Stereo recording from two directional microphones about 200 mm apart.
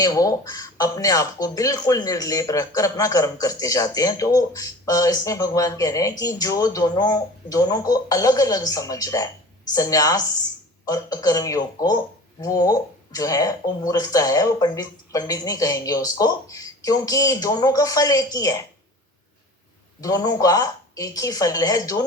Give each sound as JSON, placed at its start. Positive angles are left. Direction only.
{"t": 0.0, "sound": "speech", "side_deg": 15}
{"t": 20.0, "sound": "speech", "side_deg": 15}